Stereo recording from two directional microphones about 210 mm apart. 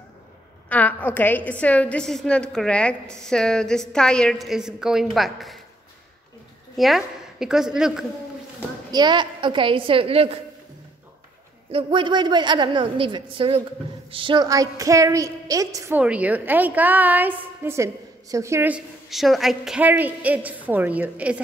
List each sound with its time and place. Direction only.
0.7 s a woman's voice: 10° left (ahead or behind)
6.8 s a woman's voice: centre (ahead or behind)
8.9 s a woman's voice: 20° right (ahead or behind)
11.7 s a woman's voice: 25° right (ahead or behind); by 21.4 s 5° right (ahead or behind)